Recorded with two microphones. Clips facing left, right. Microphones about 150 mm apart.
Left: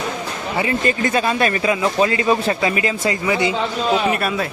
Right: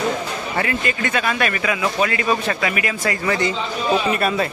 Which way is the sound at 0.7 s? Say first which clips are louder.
Left 4 dB; 35° left (ahead or behind).